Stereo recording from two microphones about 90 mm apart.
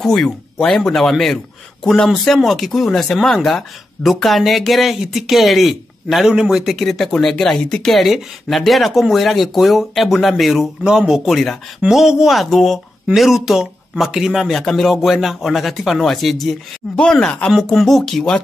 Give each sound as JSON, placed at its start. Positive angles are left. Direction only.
{"t": 0.0, "sound": "a man's voice", "side_deg": 5}